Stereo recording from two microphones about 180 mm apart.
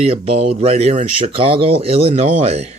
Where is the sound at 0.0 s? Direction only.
35° right (ahead or behind).